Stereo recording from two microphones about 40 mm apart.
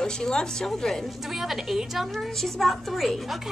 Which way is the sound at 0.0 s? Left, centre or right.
Centre.